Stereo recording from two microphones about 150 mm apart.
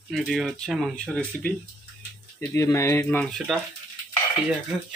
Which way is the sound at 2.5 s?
20° left (ahead or behind).